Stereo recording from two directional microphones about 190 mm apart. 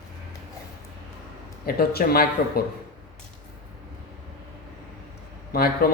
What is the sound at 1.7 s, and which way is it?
Speech, 55° left (ahead or behind).